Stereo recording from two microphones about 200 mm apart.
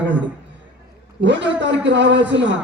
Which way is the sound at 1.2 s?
65° right (ahead or behind).